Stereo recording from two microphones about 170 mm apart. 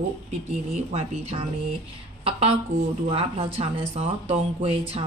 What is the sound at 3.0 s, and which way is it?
Speech, 35° right (ahead or behind).